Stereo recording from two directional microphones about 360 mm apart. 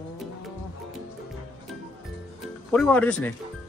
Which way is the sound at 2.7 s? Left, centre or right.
Centre.